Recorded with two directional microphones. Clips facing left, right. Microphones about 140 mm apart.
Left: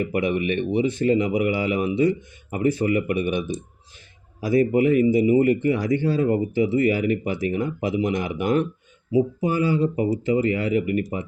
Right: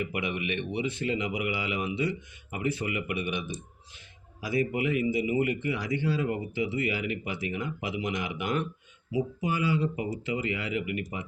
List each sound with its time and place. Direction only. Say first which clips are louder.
0.0 s speech: left 9 dB; 40° left (ahead or behind)